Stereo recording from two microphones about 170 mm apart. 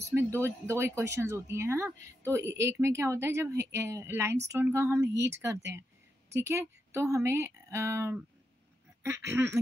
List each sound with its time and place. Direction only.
0.1 s speech: 15° right (ahead or behind)